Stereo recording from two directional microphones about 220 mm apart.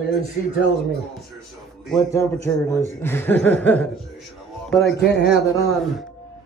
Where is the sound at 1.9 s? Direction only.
10° left (ahead or behind).